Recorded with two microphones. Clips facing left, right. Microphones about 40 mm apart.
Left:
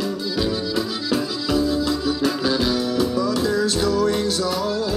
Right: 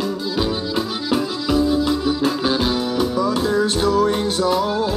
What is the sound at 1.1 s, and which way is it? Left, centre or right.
Music, centre.